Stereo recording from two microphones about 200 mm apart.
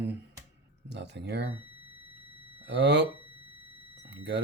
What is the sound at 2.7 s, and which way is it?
Speech, 60° right (ahead or behind).